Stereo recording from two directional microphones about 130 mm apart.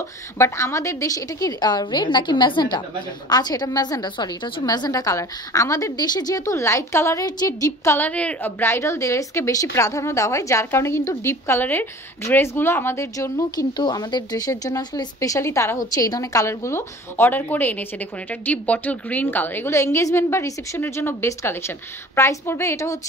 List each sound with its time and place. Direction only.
0.4 s a woman's voice: 20° left (ahead or behind)
8.1 s a woman's voice: 10° left (ahead or behind)